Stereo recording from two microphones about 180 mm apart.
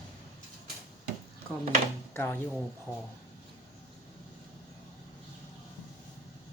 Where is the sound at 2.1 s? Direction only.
15° left (ahead or behind).